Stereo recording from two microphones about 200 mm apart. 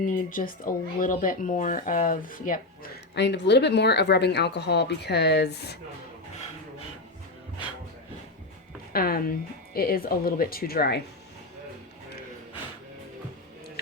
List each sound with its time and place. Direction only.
0.0 s speech: 45° left (ahead or behind)
8.9 s a woman's voice: 50° left (ahead or behind)